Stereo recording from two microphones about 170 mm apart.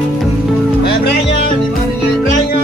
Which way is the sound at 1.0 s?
65° left (ahead or behind).